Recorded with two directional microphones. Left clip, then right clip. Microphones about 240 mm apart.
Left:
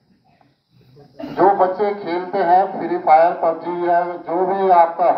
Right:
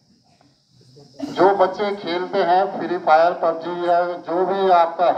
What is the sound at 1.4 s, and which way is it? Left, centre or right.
A woman's voice, right.